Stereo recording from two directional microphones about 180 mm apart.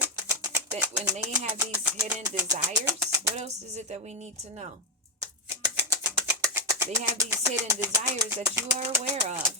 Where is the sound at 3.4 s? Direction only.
40° right (ahead or behind).